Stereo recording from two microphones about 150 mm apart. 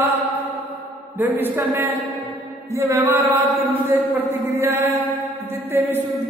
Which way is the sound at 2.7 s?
20° right (ahead or behind).